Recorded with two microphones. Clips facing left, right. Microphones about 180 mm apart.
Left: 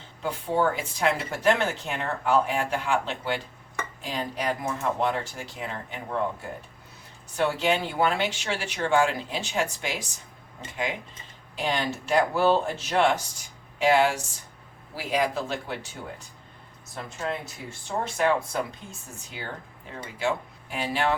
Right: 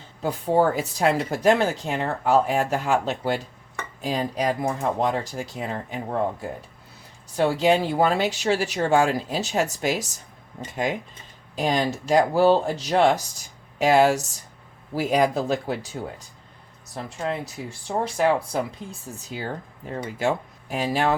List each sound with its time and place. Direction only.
0.2 s speech: 40° right (ahead or behind)
7.3 s speech: 35° right (ahead or behind)
11.5 s speech: 40° right (ahead or behind)
16.9 s speech: 35° right (ahead or behind)